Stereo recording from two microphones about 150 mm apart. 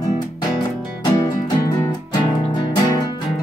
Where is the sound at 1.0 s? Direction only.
25° left (ahead or behind).